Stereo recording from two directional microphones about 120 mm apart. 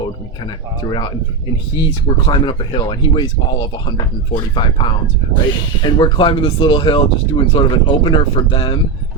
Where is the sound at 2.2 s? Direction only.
45° left (ahead or behind).